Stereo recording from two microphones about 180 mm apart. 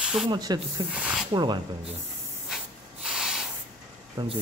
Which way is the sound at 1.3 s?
25° right (ahead or behind).